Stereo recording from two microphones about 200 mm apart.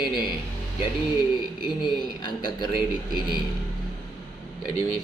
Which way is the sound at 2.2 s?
20° left (ahead or behind).